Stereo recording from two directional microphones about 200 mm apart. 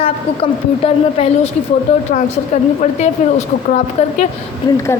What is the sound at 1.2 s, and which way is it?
A woman's voice, 30° left (ahead or behind).